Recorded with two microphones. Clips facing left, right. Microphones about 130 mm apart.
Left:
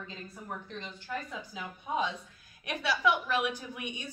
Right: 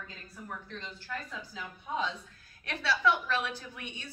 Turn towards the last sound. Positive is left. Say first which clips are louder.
# left 4 dB
turn(degrees=15)  # may be behind; listen again after turning